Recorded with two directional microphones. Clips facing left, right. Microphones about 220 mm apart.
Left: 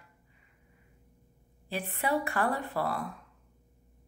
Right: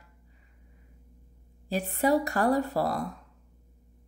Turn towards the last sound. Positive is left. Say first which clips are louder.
# right 5 dB
turn(degrees=-40)  # may be behind; listen again after turning